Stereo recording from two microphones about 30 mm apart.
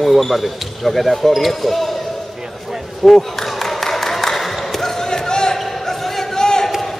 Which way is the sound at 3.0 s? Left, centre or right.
Centre.